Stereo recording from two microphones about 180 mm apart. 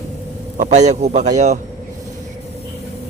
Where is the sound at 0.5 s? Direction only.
45° right (ahead or behind).